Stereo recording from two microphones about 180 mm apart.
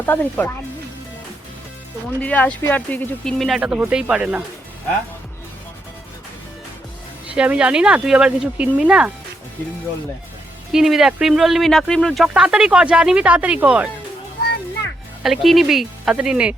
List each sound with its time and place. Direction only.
0.0 s speech: 10° left (ahead or behind)
2.0 s speech: 10° left (ahead or behind); by 4.4 s 5° right (ahead or behind)
7.3 s speech: 5° right (ahead or behind)
10.7 s speech: centre (ahead or behind)
15.2 s speech: centre (ahead or behind)